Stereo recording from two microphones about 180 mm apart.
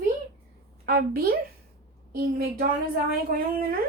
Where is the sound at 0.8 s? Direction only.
60° right (ahead or behind).